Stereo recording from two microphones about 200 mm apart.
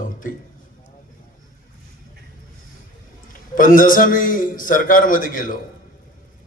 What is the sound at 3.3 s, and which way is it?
A man's voice, 45° left (ahead or behind).